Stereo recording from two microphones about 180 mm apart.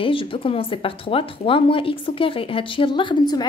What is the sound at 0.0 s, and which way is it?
Speech, 30° left (ahead or behind).